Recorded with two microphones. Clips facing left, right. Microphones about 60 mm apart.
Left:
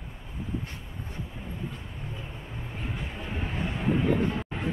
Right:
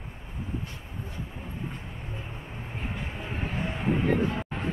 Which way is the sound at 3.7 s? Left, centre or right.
Right.